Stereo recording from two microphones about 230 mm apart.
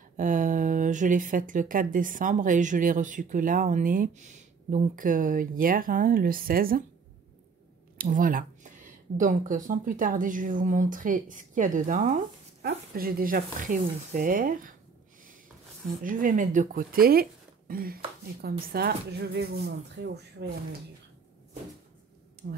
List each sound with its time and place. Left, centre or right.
0.2 s speech: right
8.0 s speech: right
16.0 s speech: right
22.4 s speech: right